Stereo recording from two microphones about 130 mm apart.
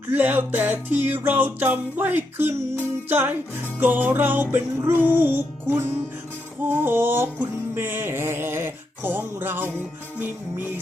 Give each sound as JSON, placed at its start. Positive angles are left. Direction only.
{"t": 0.1, "sound": "music", "side_deg": -15}